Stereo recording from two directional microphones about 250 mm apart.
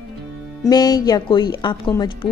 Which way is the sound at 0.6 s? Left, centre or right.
Centre.